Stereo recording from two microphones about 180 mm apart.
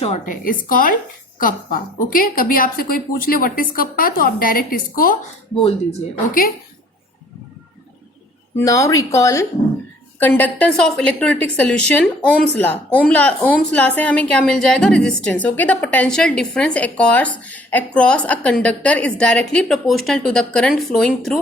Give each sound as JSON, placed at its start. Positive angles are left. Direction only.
{"t": 0.0, "sound": "a woman's voice", "side_deg": 45}
{"t": 8.5, "sound": "a woman's voice", "side_deg": 15}